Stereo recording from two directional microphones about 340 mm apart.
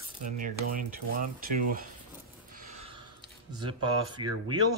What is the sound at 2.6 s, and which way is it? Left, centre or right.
Gasp, centre.